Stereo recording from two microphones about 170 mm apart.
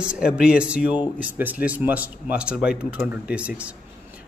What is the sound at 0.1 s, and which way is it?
A man's voice, 5° right (ahead or behind).